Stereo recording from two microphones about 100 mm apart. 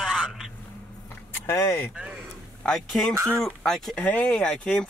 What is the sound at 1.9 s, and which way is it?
Speech, 10° right (ahead or behind).